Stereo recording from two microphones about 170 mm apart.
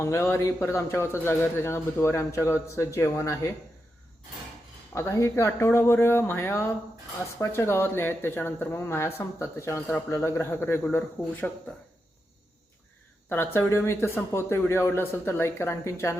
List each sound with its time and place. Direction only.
0.0 s speech: 15° left (ahead or behind)
4.9 s speech: 15° left (ahead or behind)
13.3 s speech: 15° left (ahead or behind)